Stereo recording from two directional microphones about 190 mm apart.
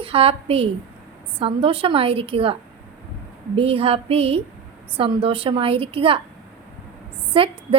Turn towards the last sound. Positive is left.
turn(degrees=-30)  # may be behind; listen again after turning